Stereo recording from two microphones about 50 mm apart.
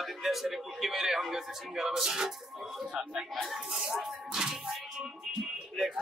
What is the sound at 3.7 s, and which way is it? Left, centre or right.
Speech, centre.